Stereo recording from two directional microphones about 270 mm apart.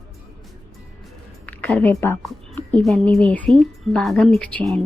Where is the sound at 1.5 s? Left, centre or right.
Centre.